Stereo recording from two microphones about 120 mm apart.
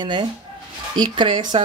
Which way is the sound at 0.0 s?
40° right (ahead or behind).